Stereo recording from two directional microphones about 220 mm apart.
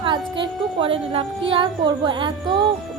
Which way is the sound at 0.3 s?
20° right (ahead or behind).